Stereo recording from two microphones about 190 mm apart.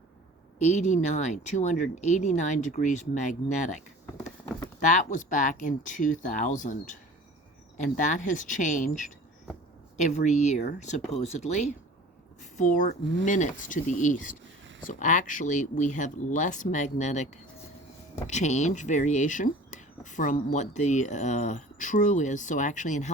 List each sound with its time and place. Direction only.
0.6 s speech: 40° left (ahead or behind)